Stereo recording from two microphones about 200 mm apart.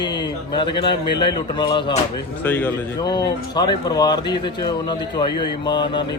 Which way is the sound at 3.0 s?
20° left (ahead or behind).